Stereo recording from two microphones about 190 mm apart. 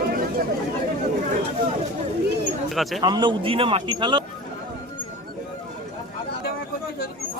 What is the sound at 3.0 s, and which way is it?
A man's voice, 20° right (ahead or behind).